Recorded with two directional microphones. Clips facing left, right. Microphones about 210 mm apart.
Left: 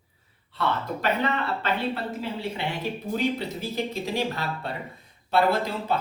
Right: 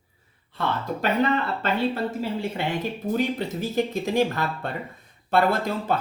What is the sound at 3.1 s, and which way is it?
Speech, 50° right (ahead or behind).